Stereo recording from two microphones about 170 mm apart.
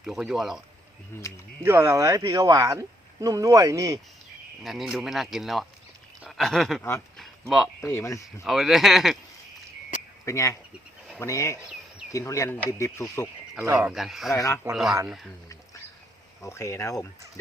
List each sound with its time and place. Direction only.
0.0 s speech: 5° right (ahead or behind)
1.1 s speech: 15° left (ahead or behind)
1.6 s speech: 15° right (ahead or behind)
4.6 s speech: centre (ahead or behind)
7.2 s a sound: centre (ahead or behind)
7.8 s speech: 15° left (ahead or behind)
8.4 s speech: centre (ahead or behind)
10.2 s speech: 15° left (ahead or behind)
13.6 s speech: 10° right (ahead or behind)
14.3 s speech: 15° left (ahead or behind)
15.0 s speech: 5° right (ahead or behind)
16.4 s speech: 15° left (ahead or behind)